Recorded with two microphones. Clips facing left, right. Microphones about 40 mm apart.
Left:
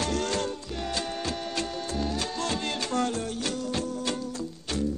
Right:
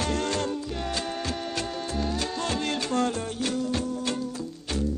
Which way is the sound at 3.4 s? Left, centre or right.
Centre.